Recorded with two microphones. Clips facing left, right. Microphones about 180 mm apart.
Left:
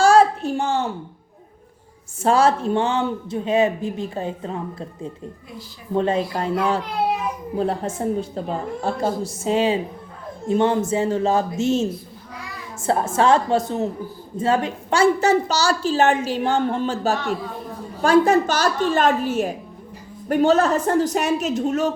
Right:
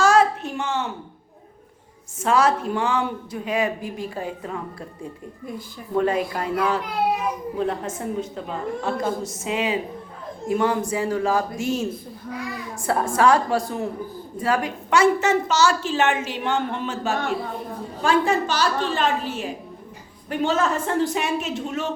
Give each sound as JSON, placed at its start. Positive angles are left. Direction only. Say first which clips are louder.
{"t": 0.0, "sound": "a sound", "louder": "left 3 dB", "side_deg": 35}
{"t": 2.2, "sound": "speech", "louder": "left 3 dB", "side_deg": 30}
{"t": 5.9, "sound": "a woman's voice", "louder": "left 1 dB", "side_deg": 25}